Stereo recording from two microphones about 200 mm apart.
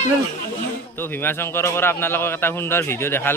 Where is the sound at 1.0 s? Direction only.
10° left (ahead or behind).